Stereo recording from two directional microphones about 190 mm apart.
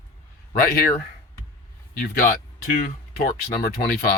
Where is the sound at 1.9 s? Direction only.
50° left (ahead or behind).